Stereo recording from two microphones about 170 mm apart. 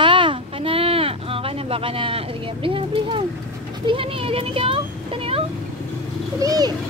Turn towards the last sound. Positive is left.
turn(degrees=-20)  # may be behind; listen again after turning